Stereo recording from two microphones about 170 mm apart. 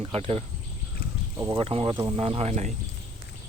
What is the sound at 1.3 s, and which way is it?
Speech, 20° right (ahead or behind).